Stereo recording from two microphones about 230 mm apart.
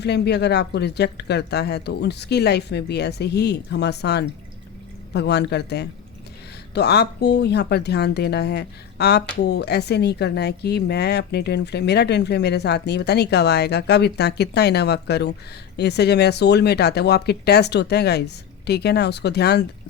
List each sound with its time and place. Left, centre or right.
0.0 s speech: left